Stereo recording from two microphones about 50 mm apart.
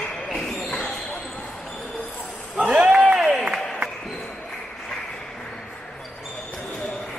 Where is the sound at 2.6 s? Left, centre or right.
Centre.